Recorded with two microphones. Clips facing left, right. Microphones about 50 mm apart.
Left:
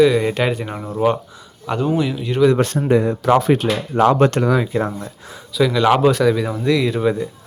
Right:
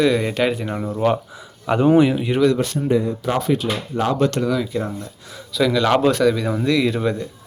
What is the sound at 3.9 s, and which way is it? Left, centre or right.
Speech, left.